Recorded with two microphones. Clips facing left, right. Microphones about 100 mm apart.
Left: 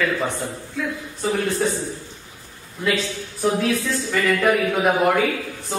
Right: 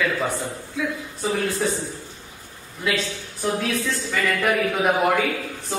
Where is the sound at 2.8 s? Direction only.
Centre (ahead or behind).